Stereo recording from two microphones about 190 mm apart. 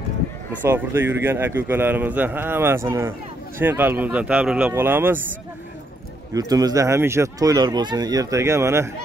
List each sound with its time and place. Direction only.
0.7 s a man's voice: 10° right (ahead or behind)
6.3 s a man's voice: 20° right (ahead or behind)